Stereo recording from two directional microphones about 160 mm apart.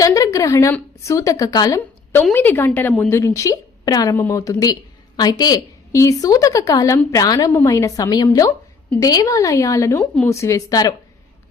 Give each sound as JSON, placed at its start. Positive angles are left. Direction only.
{"t": 0.0, "sound": "a woman's voice", "side_deg": 20}
{"t": 2.3, "sound": "a woman's voice", "side_deg": 10}